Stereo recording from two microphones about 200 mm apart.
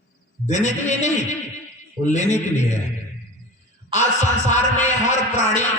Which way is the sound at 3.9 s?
35° left (ahead or behind).